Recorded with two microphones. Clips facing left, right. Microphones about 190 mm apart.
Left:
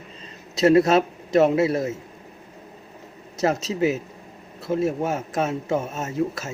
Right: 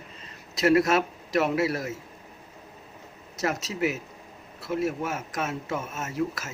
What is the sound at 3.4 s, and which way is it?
Speech, 25° left (ahead or behind).